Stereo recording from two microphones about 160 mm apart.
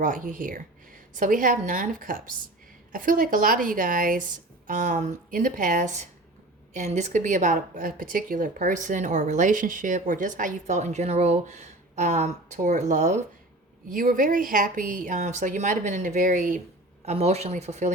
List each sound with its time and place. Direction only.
0.0 s a woman's voice: 55° right (ahead or behind)
17.1 s a woman's voice: 40° right (ahead or behind)